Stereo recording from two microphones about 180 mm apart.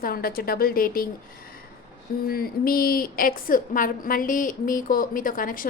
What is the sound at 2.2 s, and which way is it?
A woman's voice, 55° left (ahead or behind).